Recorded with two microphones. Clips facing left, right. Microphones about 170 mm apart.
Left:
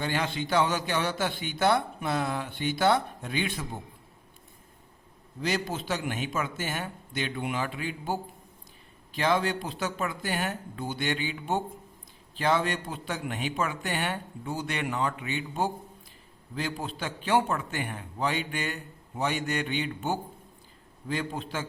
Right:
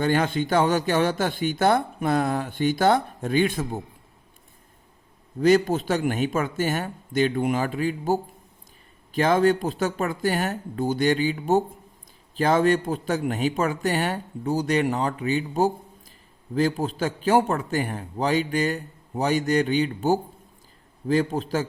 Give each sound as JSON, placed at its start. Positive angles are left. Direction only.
{"t": 0.0, "sound": "a man's voice", "side_deg": -50}
{"t": 5.4, "sound": "a man's voice", "side_deg": -50}